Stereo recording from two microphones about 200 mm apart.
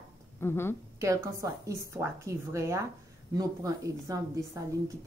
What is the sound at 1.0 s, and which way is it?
A woman's voice, 15° right (ahead or behind).